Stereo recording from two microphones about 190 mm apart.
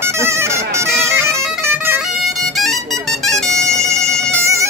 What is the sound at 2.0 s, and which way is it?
Music, centre (ahead or behind).